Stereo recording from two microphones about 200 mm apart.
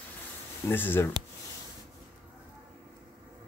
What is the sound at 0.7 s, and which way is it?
Speech, 10° left (ahead or behind).